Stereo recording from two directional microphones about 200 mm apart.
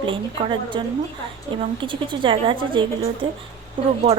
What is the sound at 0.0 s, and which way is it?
A woman's voice, 25° right (ahead or behind).